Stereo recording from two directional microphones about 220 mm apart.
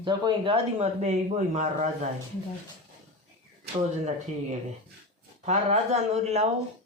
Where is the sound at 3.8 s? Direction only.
30° right (ahead or behind).